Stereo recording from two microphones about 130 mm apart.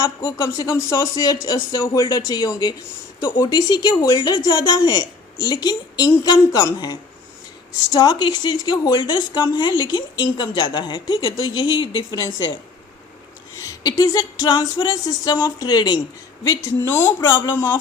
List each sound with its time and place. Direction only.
0.3 s a sound: 20° left (ahead or behind)
3.5 s speech: 35° left (ahead or behind)
13.6 s a sound: 25° left (ahead or behind)
16.9 s speech: 15° left (ahead or behind)
17.2 s speech: 30° left (ahead or behind)
17.5 s speech: 15° left (ahead or behind)